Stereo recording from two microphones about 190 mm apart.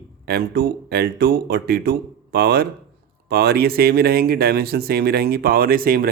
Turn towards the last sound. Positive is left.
turn(degrees=-50)  # may be behind; listen again after turning